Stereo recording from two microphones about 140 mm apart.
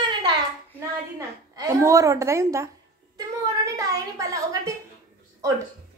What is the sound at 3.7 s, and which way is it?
A woman's voice, 25° right (ahead or behind).